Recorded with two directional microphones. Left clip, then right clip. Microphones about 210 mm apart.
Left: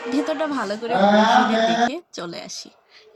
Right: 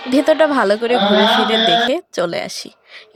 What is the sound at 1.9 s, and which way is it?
A woman's voice, 40° right (ahead or behind).